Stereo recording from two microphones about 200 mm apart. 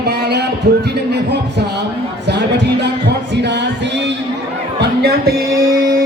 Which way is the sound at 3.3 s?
60° right (ahead or behind).